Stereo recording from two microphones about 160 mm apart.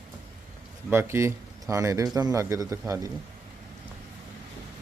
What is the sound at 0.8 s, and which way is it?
Speech, 15° right (ahead or behind).